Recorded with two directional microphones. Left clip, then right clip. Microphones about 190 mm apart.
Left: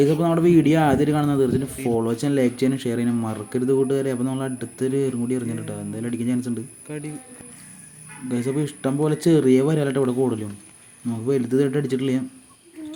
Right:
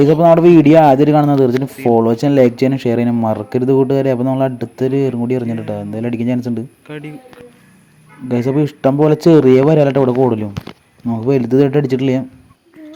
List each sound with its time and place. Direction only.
0.0 s speech: 30° right (ahead or behind)
6.8 s speech: centre (ahead or behind)
8.3 s speech: 30° right (ahead or behind)